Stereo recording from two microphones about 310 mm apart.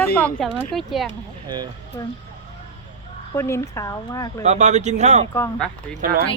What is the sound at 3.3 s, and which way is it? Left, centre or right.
Speech, centre.